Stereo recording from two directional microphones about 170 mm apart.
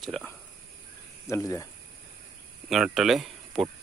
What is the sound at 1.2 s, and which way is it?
Speech, 20° left (ahead or behind).